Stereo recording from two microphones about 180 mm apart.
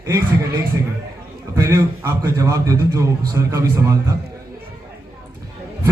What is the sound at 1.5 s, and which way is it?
A man's voice, 15° right (ahead or behind).